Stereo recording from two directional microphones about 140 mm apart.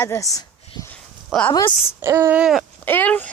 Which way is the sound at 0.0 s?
20° left (ahead or behind).